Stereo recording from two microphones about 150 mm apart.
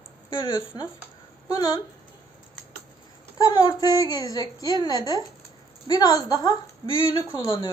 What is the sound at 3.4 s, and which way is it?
A woman's voice, 25° left (ahead or behind).